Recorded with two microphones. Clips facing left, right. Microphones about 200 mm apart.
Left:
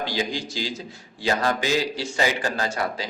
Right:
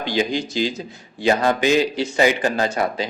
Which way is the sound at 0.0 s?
20° right (ahead or behind).